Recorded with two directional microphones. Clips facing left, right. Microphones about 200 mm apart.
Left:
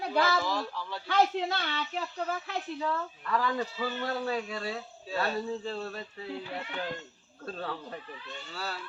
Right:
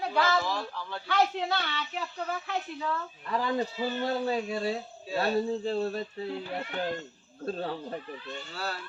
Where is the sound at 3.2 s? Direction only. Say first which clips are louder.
Right 2 dB; 25° right (ahead or behind).